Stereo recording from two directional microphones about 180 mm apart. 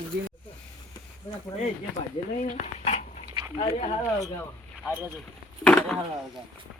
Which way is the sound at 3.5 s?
30° left (ahead or behind).